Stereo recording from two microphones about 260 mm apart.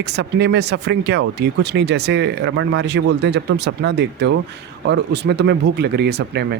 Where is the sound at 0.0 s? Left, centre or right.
Right.